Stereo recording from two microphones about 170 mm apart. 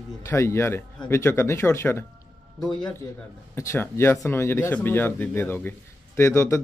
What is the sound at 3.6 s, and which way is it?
Speech, 15° left (ahead or behind).